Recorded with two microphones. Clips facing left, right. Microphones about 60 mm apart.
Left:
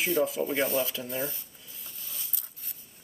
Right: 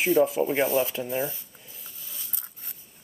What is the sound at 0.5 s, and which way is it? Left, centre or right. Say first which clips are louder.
Speech: right 4 dB; centre.